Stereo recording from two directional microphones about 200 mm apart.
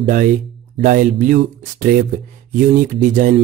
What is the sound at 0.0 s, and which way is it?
Speech, 40° right (ahead or behind).